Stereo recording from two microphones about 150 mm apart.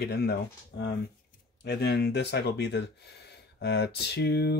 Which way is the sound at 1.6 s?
90° left.